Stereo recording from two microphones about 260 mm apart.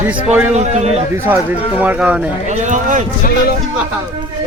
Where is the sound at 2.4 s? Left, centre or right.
Right.